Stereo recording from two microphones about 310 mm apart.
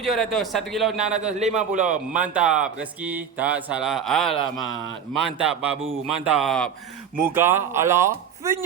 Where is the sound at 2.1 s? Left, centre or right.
Centre.